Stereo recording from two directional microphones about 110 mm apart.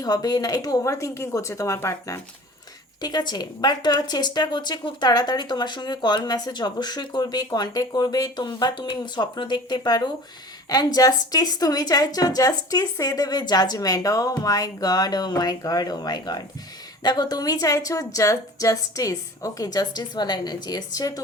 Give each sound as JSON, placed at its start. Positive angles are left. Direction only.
{"t": 0.0, "sound": "speech", "side_deg": 35}
{"t": 3.0, "sound": "speech", "side_deg": 40}